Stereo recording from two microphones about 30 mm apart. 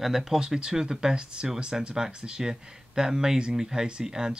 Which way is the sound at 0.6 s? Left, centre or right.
Right.